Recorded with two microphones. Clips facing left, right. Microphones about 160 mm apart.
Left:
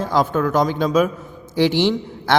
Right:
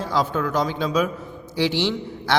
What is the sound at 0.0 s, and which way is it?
A man's voice, 50° left (ahead or behind).